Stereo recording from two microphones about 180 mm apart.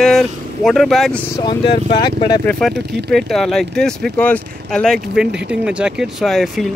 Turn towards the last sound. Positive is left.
turn(degrees=0)  # may be behind; listen again after turning